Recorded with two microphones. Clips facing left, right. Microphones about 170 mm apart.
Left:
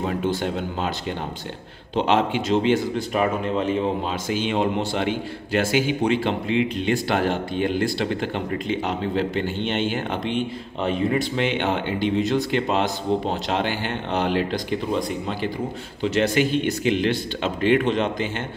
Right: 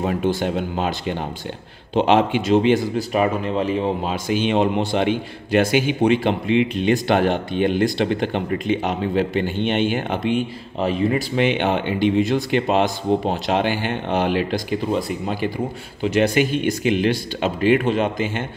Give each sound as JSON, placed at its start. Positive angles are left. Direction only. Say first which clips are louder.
{"t": 0.0, "sound": "a man's voice", "louder": "right 3 dB", "side_deg": -15}
{"t": 3.0, "sound": "speech", "louder": "right 2 dB", "side_deg": -5}
{"t": 4.1, "sound": "a man's voice", "louder": "right 4 dB", "side_deg": -15}
{"t": 11.3, "sound": "a man's voice", "louder": "right 4 dB", "side_deg": -15}